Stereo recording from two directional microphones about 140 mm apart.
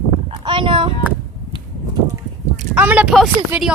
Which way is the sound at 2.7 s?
10° right (ahead or behind).